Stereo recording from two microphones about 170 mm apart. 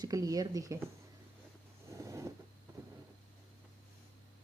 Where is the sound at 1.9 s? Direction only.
20° right (ahead or behind).